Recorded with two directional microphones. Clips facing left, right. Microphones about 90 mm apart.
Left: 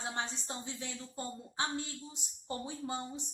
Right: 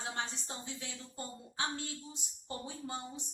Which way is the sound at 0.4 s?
25° left (ahead or behind).